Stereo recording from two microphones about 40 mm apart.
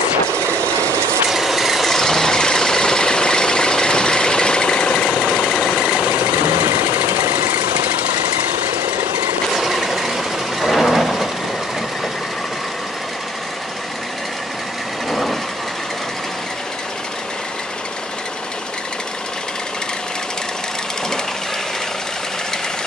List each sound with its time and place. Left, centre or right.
1.3 s vehicle: centre
2.0 s vehicle: centre
5.0 s vehicle: centre
5.7 s vehicle: right
6.4 s engine: right
7.2 s engine: right
9.5 s vehicle: centre
15.0 s vehicle: centre